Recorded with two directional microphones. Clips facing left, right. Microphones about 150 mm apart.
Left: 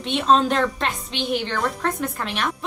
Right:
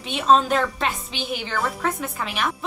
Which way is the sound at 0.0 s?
Centre (ahead or behind).